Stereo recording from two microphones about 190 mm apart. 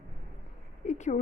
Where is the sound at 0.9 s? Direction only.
40° left (ahead or behind).